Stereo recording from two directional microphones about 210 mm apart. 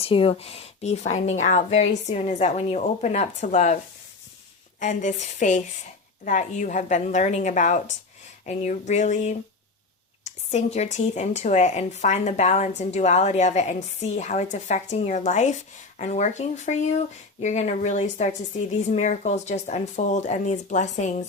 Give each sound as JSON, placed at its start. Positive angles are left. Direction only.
{"t": 0.0, "sound": "speech", "side_deg": 25}
{"t": 4.8, "sound": "speech", "side_deg": 35}